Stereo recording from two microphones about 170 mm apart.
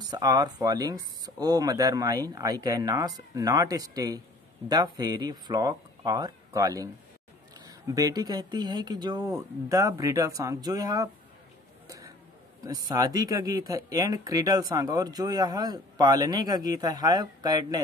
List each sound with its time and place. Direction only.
0.0 s speech: 25° right (ahead or behind)
12.6 s speech: 20° right (ahead or behind)